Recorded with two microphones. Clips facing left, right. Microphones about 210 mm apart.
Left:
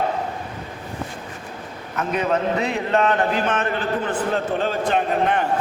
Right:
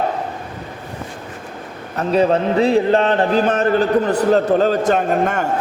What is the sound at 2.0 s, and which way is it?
A man's voice, 30° right (ahead or behind).